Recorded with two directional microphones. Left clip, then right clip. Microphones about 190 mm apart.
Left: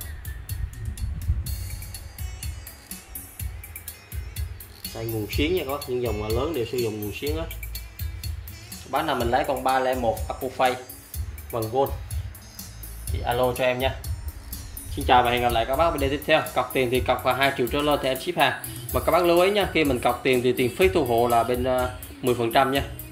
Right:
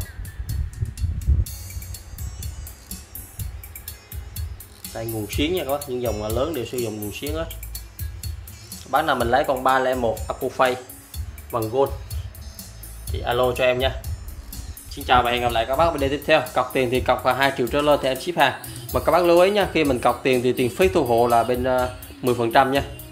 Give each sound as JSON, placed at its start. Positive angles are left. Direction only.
{"t": 4.9, "sound": "speech", "side_deg": -20}
{"t": 8.9, "sound": "speech", "side_deg": -20}
{"t": 13.1, "sound": "speech", "side_deg": -15}
{"t": 15.0, "sound": "speech", "side_deg": -10}